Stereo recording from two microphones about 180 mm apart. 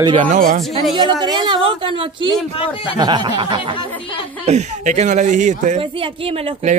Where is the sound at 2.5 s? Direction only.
30° left (ahead or behind).